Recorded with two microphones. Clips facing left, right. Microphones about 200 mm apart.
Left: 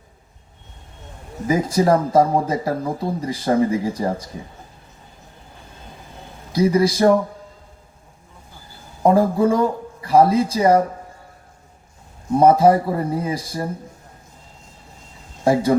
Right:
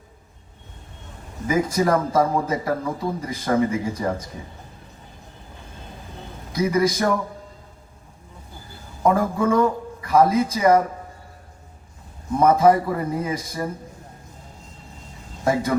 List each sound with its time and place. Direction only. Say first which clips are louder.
1.5 s speech: left 3 dB; 35° left (ahead or behind)
6.5 s speech: left 3 dB; 30° left (ahead or behind)
9.0 s speech: left 4 dB; 30° left (ahead or behind)
12.4 s speech: left 3 dB; 30° left (ahead or behind)
15.4 s speech: left 5 dB; 30° left (ahead or behind)